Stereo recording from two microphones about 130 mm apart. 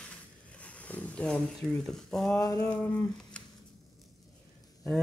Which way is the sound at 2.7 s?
10° left (ahead or behind).